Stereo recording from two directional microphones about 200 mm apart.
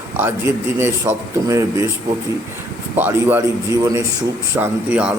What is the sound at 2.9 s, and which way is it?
A man's voice, 10° right (ahead or behind).